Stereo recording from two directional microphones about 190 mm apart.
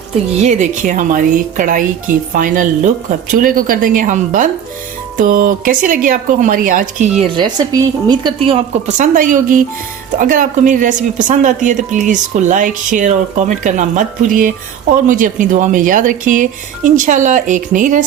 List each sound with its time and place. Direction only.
0.3 s speech: 40° right (ahead or behind)
7.3 s a woman's voice: 20° right (ahead or behind); by 18.0 s 45° right (ahead or behind)